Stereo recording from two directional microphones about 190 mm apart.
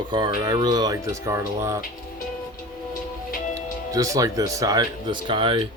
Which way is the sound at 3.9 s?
20° right (ahead or behind).